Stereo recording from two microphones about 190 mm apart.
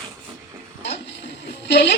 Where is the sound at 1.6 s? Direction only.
60° left (ahead or behind).